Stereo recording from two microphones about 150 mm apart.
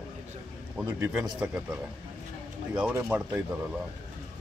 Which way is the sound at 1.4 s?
10° right (ahead or behind).